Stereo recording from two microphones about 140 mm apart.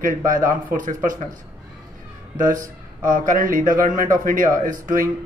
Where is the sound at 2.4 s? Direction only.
70° right (ahead or behind).